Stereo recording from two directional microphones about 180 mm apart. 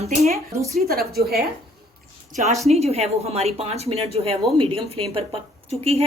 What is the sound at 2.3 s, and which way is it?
Speech, 40° right (ahead or behind).